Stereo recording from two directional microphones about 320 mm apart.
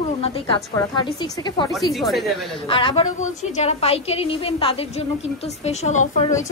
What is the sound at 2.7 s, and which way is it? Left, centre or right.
A woman's voice, centre.